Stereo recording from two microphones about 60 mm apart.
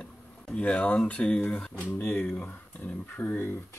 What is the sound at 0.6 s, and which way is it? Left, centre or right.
Speech, left.